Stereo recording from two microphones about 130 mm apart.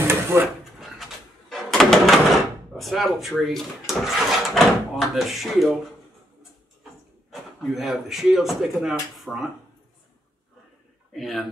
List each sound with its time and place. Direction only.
0.0 s drawer open or close: 20° right (ahead or behind)
0.7 s a sound: centre (ahead or behind)
2.7 s speech: centre (ahead or behind)
7.2 s speech: centre (ahead or behind)
11.1 s speech: centre (ahead or behind)